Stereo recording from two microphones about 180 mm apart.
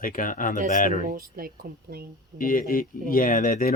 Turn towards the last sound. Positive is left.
turn(degrees=50)  # may be behind; listen again after turning